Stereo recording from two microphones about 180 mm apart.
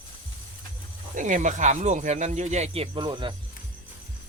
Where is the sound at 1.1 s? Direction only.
45° right (ahead or behind).